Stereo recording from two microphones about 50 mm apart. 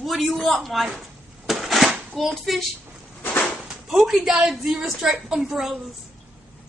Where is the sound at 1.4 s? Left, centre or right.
Centre.